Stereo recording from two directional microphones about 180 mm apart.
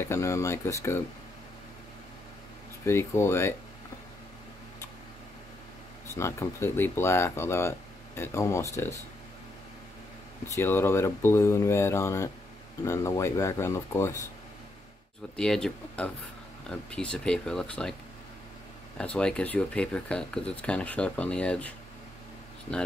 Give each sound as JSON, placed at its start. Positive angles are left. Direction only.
{"t": 0.0, "sound": "speech", "side_deg": 15}
{"t": 2.8, "sound": "speech", "side_deg": 15}
{"t": 6.1, "sound": "speech", "side_deg": 15}
{"t": 10.5, "sound": "speech", "side_deg": 15}
{"t": 15.3, "sound": "speech", "side_deg": 5}
{"t": 18.9, "sound": "speech", "side_deg": 5}